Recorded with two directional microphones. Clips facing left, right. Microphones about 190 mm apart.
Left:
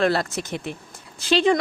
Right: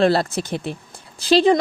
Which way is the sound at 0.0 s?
30° right (ahead or behind).